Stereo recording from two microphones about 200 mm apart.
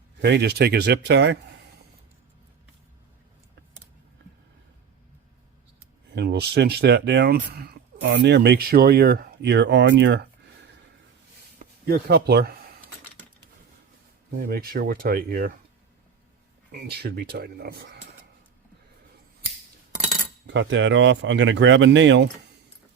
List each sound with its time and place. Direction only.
0.2 s speech: 60° right (ahead or behind)
6.1 s speech: 55° right (ahead or behind)
11.6 s a sound: 50° right (ahead or behind)
14.4 s speech: 50° right (ahead or behind)
16.7 s speech: 55° right (ahead or behind)
20.5 s speech: 65° right (ahead or behind)